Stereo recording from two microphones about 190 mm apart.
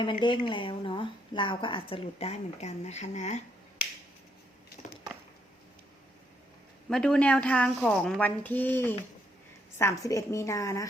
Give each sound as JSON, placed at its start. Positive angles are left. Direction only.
{"t": 0.0, "sound": "speech", "side_deg": 25}
{"t": 6.9, "sound": "a woman's voice", "side_deg": 5}